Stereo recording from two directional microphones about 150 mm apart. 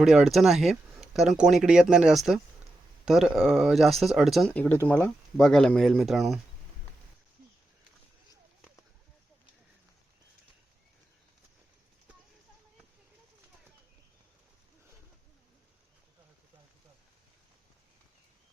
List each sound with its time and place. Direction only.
0.0 s speech: 5° right (ahead or behind)
4.5 s speech: 15° left (ahead or behind)
5.4 s speech: 5° left (ahead or behind)